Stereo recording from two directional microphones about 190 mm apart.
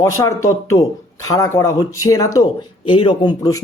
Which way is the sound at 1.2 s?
15° left (ahead or behind).